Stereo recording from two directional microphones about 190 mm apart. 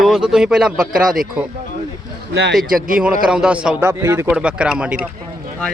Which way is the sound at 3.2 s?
5° right (ahead or behind).